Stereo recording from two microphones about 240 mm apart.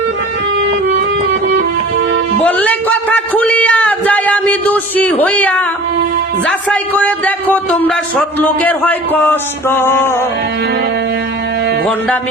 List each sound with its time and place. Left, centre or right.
2.4 s a man's voice: centre